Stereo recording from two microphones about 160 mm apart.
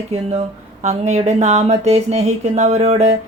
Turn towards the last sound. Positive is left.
turn(degrees=-45)  # may be behind; listen again after turning